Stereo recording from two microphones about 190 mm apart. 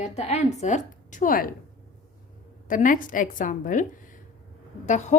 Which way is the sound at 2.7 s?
45° left (ahead or behind).